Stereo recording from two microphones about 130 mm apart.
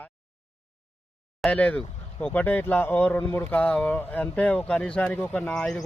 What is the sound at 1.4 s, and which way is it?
Speech, 10° left (ahead or behind).